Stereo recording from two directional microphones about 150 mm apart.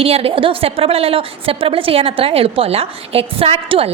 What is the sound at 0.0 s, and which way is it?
A woman's voice, 40° right (ahead or behind).